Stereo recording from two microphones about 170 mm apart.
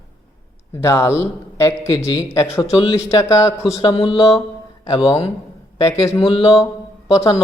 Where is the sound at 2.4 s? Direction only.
30° left (ahead or behind).